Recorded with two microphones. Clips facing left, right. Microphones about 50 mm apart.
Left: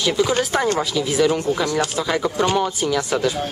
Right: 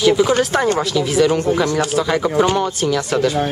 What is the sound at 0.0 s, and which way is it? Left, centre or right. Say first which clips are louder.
A man's voice: right 5 dB; centre.